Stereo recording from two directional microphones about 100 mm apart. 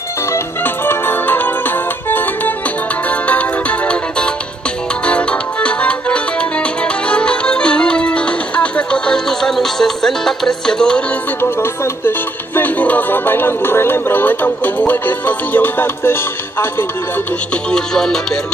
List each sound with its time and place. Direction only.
0.8 s music: 20° left (ahead or behind)
11.4 s music: 25° left (ahead or behind)
17.6 s music: 5° left (ahead or behind)